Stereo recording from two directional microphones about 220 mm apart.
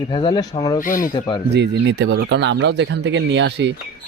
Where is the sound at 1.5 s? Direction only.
50° right (ahead or behind).